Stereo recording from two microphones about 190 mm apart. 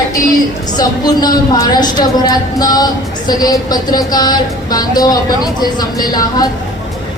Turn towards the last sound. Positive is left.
turn(degrees=20)  # may be behind; listen again after turning